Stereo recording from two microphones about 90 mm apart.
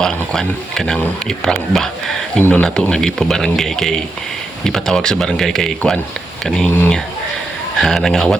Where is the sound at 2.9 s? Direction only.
5° left (ahead or behind).